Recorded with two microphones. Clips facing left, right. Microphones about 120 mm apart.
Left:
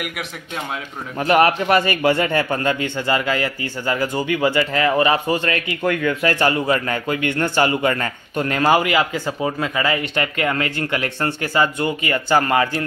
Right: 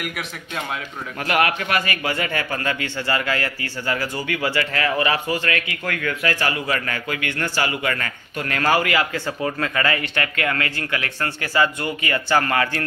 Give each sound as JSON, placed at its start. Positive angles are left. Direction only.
{"t": 1.2, "sound": "speech", "side_deg": 30}